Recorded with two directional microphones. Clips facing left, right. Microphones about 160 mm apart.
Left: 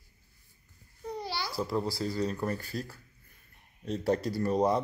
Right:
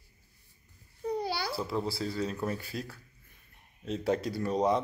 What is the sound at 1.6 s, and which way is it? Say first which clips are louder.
Speech: left 1 dB; centre (ahead or behind).